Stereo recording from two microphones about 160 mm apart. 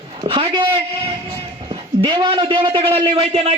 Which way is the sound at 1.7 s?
30° right (ahead or behind).